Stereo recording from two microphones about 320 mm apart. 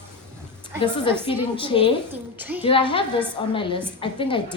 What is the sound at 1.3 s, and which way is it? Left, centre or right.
Speech, centre.